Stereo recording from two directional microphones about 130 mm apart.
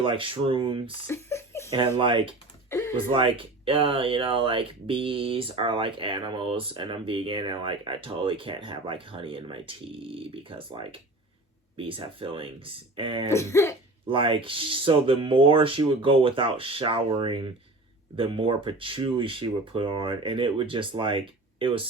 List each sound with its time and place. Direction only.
0.0 s speech: 40° right (ahead or behind)
1.0 s speech: 20° left (ahead or behind)
1.7 s speech: 40° right (ahead or behind)
2.6 s a sound: 25° left (ahead or behind)
3.1 s speech: 40° right (ahead or behind)
13.2 s speech: 20° left (ahead or behind)
14.0 s speech: 40° right (ahead or behind)